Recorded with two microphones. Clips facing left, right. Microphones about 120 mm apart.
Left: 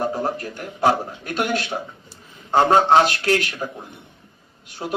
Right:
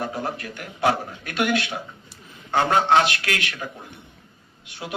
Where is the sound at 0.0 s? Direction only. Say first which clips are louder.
Left 5 dB; 35° left (ahead or behind).